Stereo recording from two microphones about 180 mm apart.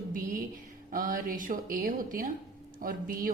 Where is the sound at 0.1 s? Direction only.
50° right (ahead or behind).